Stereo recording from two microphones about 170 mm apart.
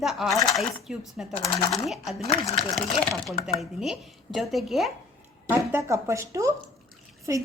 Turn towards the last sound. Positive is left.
turn(degrees=-15)  # may be behind; listen again after turning